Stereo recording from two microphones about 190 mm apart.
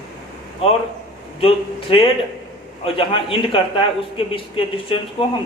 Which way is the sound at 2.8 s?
30° left (ahead or behind).